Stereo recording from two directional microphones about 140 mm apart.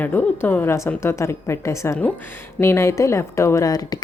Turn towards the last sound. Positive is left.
turn(degrees=25)  # may be behind; listen again after turning